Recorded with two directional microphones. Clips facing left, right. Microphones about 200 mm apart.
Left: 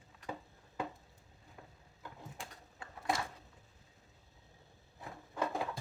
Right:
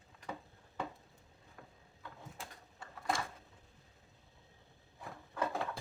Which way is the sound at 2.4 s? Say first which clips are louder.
Left 1 dB; centre (ahead or behind).